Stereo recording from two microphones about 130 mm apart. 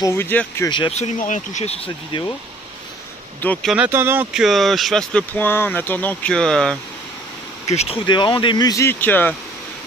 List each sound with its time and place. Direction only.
0.0 s speech: 20° left (ahead or behind)
0.7 s speech: 35° left (ahead or behind)
0.9 s speech: 70° left (ahead or behind)
3.6 s speech: 10° right (ahead or behind)
4.3 s speech: centre (ahead or behind)
7.6 s speech: 55° left (ahead or behind)
8.1 s speech: 35° left (ahead or behind); by 9.3 s 15° left (ahead or behind)